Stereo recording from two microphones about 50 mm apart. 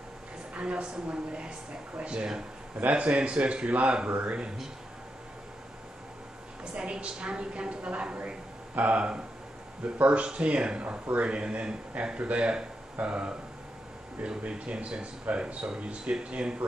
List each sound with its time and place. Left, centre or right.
0.6 s speech: right
6.6 s speech: centre